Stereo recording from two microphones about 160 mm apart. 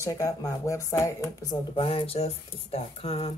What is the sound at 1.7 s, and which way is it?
Speech, 35° left (ahead or behind).